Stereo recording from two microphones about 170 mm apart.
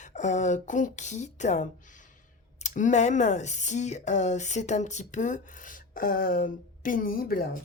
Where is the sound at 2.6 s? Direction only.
45° left (ahead or behind).